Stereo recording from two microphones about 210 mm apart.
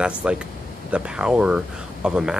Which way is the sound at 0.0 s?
5° right (ahead or behind).